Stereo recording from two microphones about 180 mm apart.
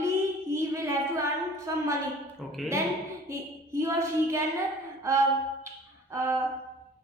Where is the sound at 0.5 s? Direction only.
15° right (ahead or behind).